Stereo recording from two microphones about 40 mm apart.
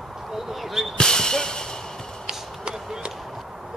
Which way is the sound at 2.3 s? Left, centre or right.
Right.